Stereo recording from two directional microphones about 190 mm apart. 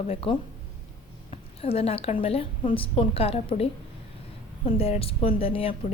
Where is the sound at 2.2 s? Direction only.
30° left (ahead or behind).